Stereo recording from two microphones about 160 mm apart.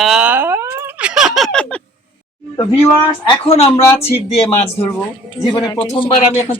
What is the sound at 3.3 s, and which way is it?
A man's voice, 35° left (ahead or behind).